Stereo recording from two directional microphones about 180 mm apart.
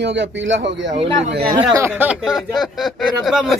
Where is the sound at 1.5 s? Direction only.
15° right (ahead or behind).